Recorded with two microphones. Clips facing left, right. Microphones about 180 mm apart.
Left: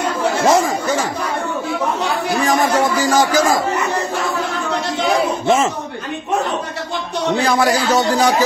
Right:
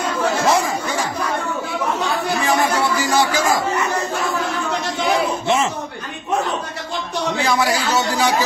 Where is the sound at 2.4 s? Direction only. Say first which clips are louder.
Left 4 dB; 40° left (ahead or behind).